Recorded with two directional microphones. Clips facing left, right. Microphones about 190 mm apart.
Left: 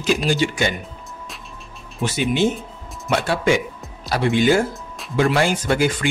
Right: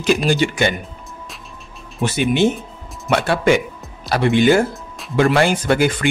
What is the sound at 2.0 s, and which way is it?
Speech, 60° right (ahead or behind).